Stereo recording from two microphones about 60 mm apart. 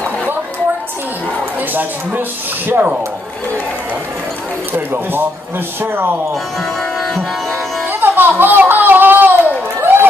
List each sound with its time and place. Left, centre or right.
1.7 s speech: right
4.7 s speech: right
7.9 s music: right
9.8 s a sound: right